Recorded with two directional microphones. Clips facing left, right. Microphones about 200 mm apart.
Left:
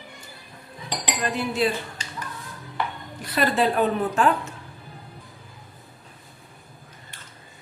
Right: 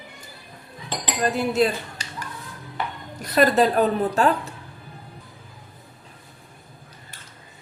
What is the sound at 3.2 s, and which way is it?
A woman's voice, 40° right (ahead or behind).